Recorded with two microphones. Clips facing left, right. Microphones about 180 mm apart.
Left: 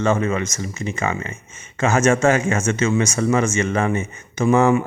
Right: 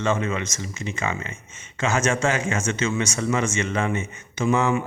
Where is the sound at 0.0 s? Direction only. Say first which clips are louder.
Left 5 dB; 45° left (ahead or behind).